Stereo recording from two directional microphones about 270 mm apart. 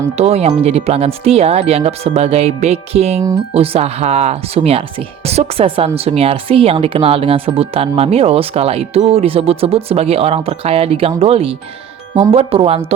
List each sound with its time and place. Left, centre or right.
0.2 s speech: right